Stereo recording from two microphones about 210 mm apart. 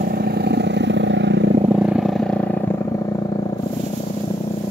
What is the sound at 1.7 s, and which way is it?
Wild animals, centre (ahead or behind).